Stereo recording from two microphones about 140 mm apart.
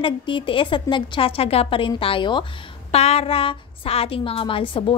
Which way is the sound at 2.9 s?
45° left (ahead or behind).